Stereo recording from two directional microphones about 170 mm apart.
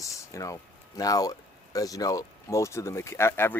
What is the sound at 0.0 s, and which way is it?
Speech, 20° left (ahead or behind).